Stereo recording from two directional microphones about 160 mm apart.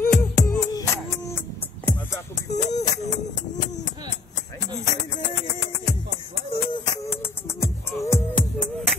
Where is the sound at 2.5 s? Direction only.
45° left (ahead or behind).